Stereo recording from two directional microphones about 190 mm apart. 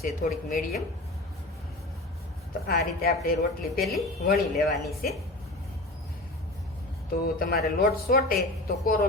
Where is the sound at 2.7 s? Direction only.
55° left (ahead or behind).